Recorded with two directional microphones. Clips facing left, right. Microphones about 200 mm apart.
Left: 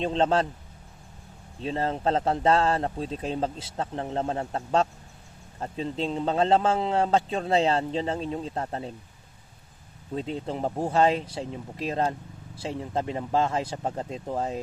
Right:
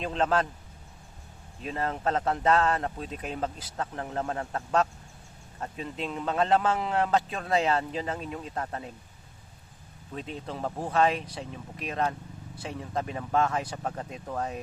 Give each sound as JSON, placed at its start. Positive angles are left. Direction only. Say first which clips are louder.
{"t": 0.0, "sound": "a man's voice", "louder": "left 3 dB", "side_deg": 30}
{"t": 1.6, "sound": "a man's voice", "louder": "left 3 dB", "side_deg": 30}
{"t": 10.2, "sound": "a man's voice", "louder": "left 5 dB", "side_deg": 30}